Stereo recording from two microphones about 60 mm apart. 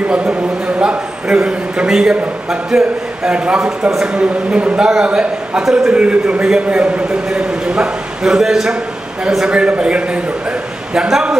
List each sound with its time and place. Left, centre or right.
0.1 s a man's voice: centre